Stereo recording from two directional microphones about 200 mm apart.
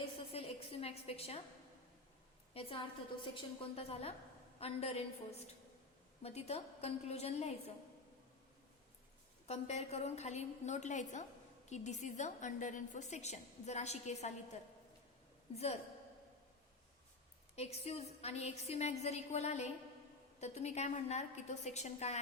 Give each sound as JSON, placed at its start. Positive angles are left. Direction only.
{"t": 0.3, "sound": "a sound", "side_deg": 30}
{"t": 2.5, "sound": "a woman's voice", "side_deg": 30}
{"t": 9.5, "sound": "a woman's voice", "side_deg": 35}
{"t": 17.5, "sound": "a woman's voice", "side_deg": 30}